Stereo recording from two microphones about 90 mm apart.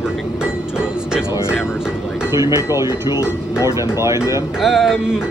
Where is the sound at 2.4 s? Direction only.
35° right (ahead or behind).